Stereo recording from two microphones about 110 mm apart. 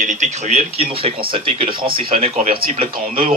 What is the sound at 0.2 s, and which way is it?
Speech, 75° right (ahead or behind).